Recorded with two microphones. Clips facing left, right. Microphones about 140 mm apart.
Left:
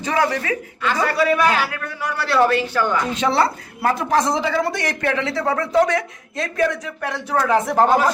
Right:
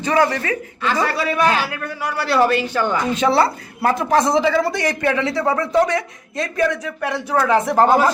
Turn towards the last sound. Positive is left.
turn(degrees=0)  # may be behind; listen again after turning